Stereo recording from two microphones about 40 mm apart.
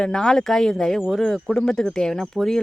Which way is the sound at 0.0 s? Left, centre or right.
Centre.